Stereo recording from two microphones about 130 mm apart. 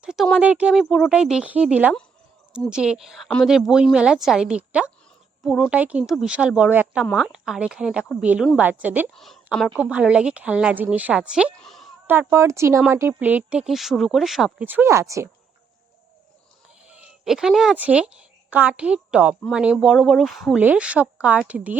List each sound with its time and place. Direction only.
0.0 s a sound: 5° right (ahead or behind)
0.3 s a woman's voice: 10° right (ahead or behind)
9.1 s a woman's voice: centre (ahead or behind)
9.7 s a woman's voice: 10° right (ahead or behind)
11.5 s a sound: centre (ahead or behind)
12.3 s a woman's voice: 20° right (ahead or behind); by 14.5 s centre (ahead or behind)
14.6 s speech: 15° right (ahead or behind)
16.8 s a woman's voice: 5° right (ahead or behind)
20.6 s a woman's voice: 10° right (ahead or behind)